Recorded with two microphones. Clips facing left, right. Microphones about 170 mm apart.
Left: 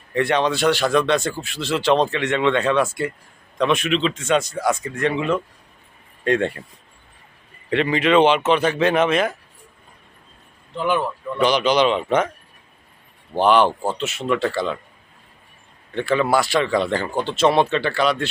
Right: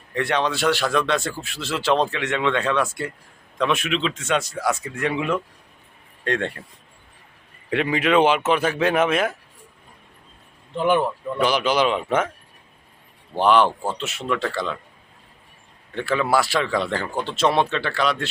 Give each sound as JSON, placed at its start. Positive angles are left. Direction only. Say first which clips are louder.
{"t": 0.1, "sound": "speech", "louder": "left 3 dB", "side_deg": 0}
{"t": 6.2, "sound": "speech", "louder": "left 5 dB", "side_deg": 5}
{"t": 7.7, "sound": "speech", "louder": "left 2 dB", "side_deg": -5}
{"t": 10.8, "sound": "speech", "louder": "right 2 dB", "side_deg": -25}
{"t": 11.3, "sound": "speech", "louder": "left 3 dB", "side_deg": -5}
{"t": 13.3, "sound": "speech", "louder": "left 1 dB", "side_deg": 0}
{"t": 16.0, "sound": "speech", "louder": "left 2 dB", "side_deg": 0}